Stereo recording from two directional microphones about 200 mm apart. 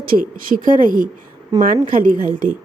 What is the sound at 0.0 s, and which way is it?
Speech, 45° right (ahead or behind).